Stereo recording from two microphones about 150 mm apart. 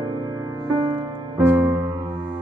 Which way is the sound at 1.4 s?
15° right (ahead or behind).